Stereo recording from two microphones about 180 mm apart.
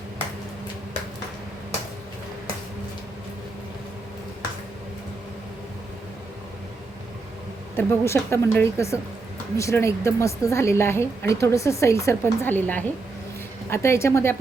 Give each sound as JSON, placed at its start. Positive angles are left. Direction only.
{"t": 7.8, "sound": "a woman's voice", "side_deg": 15}